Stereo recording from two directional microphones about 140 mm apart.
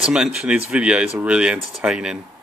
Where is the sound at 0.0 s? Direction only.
5° right (ahead or behind).